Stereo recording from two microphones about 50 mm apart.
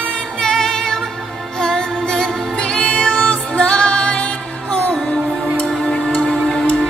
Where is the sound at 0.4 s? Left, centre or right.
Centre; by 4.9 s left.